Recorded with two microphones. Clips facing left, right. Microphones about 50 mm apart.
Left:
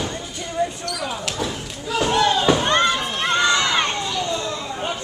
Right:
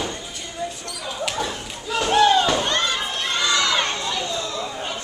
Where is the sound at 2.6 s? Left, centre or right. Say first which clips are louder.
Left 4 dB; left.